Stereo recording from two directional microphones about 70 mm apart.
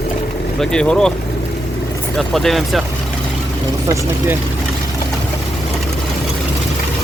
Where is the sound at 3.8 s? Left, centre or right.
Right.